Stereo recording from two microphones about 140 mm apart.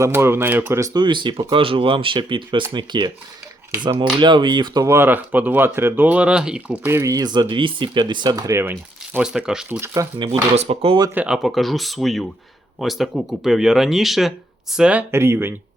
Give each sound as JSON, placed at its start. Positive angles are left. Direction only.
{"t": 0.0, "sound": "speech", "side_deg": -15}
{"t": 0.9, "sound": "speech", "side_deg": -35}
{"t": 4.2, "sound": "speech", "side_deg": -35}
{"t": 6.8, "sound": "speech", "side_deg": -20}
{"t": 9.6, "sound": "speech", "side_deg": -15}
{"t": 10.5, "sound": "speech", "side_deg": -45}
{"t": 11.1, "sound": "speech", "side_deg": -10}
{"t": 11.4, "sound": "speech", "side_deg": 0}